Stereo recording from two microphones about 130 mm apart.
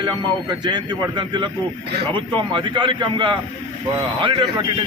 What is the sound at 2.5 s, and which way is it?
A man's voice, 35° right (ahead or behind).